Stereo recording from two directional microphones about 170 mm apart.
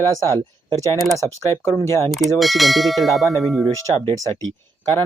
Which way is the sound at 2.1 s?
Centre (ahead or behind).